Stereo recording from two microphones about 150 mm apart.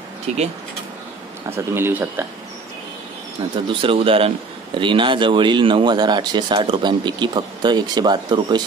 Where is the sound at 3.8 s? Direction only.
35° right (ahead or behind).